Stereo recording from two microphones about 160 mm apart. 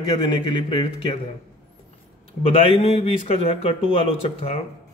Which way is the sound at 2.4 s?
35° left (ahead or behind).